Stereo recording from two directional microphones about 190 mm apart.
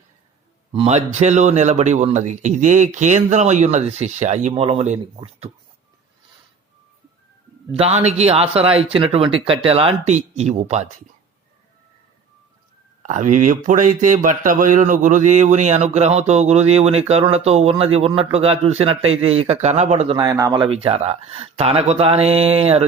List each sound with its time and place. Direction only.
0.7 s speech: 30° right (ahead or behind)
7.7 s speech: 35° right (ahead or behind)
13.0 s speech: 40° right (ahead or behind)
20.1 s speech: 20° right (ahead or behind)